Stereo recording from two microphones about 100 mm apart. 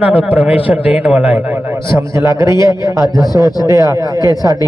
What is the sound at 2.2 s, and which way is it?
Speech, 30° right (ahead or behind).